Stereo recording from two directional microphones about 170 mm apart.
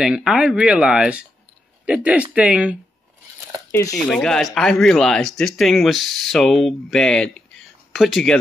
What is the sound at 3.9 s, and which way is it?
Speech, 5° left (ahead or behind).